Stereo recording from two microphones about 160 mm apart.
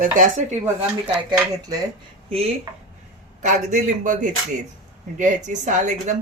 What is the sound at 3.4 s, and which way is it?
Speech, 50° right (ahead or behind).